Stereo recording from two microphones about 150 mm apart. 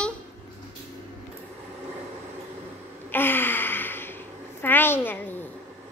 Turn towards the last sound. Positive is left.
turn(degrees=15)  # may be behind; listen again after turning